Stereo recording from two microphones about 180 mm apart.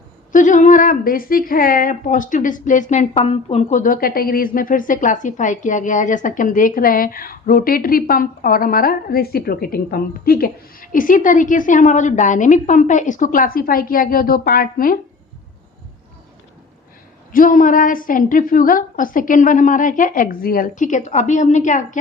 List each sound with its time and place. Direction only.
0.3 s a woman's voice: 45° left (ahead or behind)
17.3 s a woman's voice: 50° left (ahead or behind)